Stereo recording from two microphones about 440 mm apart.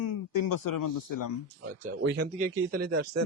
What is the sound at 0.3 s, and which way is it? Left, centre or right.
Speech, left.